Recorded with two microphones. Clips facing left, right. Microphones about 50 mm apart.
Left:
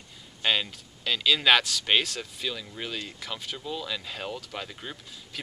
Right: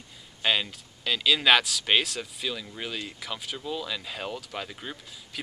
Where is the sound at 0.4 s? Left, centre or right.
Centre.